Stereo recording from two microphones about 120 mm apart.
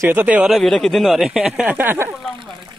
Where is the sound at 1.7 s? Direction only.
20° right (ahead or behind).